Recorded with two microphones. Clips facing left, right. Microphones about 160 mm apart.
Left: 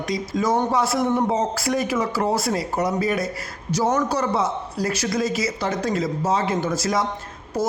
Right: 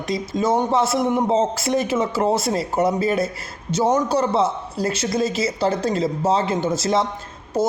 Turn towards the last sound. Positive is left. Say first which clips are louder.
# right 3 dB
turn(degrees=-25)  # may be behind; listen again after turning